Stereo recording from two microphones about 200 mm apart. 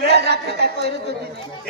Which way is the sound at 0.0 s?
55° right (ahead or behind).